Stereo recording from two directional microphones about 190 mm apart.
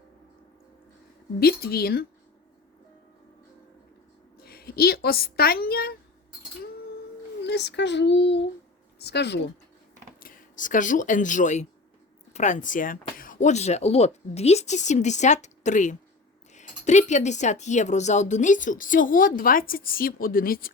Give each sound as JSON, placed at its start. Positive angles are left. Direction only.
{"t": 1.4, "sound": "a child's voice", "side_deg": 55}
{"t": 4.4, "sound": "a woman's voice", "side_deg": 55}
{"t": 7.4, "sound": "a child's voice", "side_deg": 65}
{"t": 10.2, "sound": "speech", "side_deg": 45}